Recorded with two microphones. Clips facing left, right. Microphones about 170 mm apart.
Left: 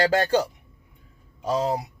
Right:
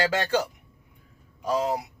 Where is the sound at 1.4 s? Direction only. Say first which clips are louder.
Left 1 dB; 30° left (ahead or behind).